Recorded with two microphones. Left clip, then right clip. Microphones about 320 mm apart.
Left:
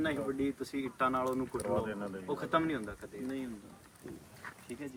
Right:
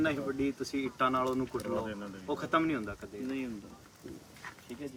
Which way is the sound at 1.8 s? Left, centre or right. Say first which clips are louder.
Left 1 dB; centre.